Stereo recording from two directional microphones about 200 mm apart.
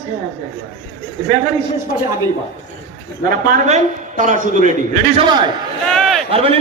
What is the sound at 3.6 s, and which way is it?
A man's voice, 35° right (ahead or behind).